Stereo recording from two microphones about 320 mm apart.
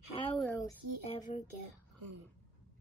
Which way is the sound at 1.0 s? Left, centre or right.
Centre.